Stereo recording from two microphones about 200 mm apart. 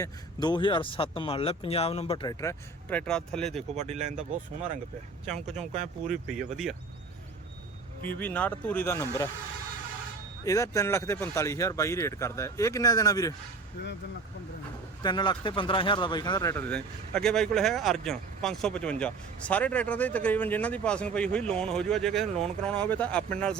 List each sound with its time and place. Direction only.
0.0 s speech: 20° left (ahead or behind)
2.4 s speech: 15° left (ahead or behind)
3.1 s speech: 5° left (ahead or behind)
3.8 s speech: 35° right (ahead or behind)
5.5 s speech: 35° right (ahead or behind)
6.3 s speech: centre (ahead or behind)
8.0 s speech: 10° left (ahead or behind)
10.4 s speech: 15° left (ahead or behind)
15.0 s speech: 20° left (ahead or behind); by 23.6 s 5° left (ahead or behind)